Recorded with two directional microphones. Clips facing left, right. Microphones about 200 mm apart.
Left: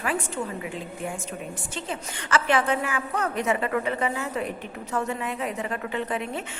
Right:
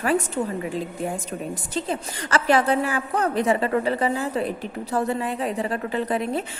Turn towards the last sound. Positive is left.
turn(degrees=-35)  # may be behind; listen again after turning